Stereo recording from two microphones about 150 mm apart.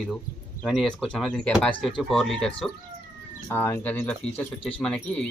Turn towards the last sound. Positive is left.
turn(degrees=10)  # may be behind; listen again after turning